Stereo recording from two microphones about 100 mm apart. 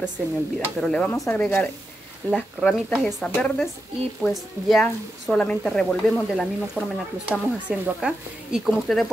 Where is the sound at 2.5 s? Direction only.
5° right (ahead or behind).